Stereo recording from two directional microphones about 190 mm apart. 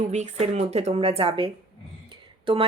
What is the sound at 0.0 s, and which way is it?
Speech, 40° right (ahead or behind).